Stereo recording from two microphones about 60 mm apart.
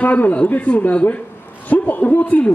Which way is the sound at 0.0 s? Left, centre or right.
Left.